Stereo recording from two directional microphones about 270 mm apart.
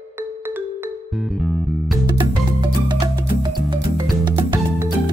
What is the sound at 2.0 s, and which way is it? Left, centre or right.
Music, centre.